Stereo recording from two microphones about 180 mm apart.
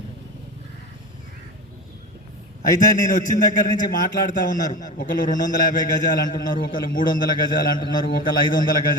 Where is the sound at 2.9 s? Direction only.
45° left (ahead or behind).